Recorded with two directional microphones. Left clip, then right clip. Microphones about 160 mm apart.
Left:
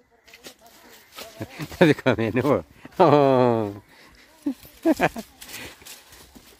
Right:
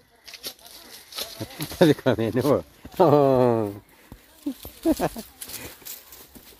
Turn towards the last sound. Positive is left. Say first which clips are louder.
# left 4 dB
turn(degrees=40)  # may be behind; listen again after turning